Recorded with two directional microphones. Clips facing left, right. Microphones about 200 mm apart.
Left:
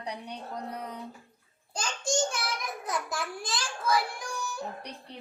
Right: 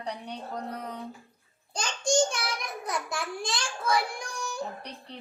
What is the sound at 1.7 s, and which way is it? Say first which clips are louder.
Child singing: right 4 dB; 5° left (ahead or behind).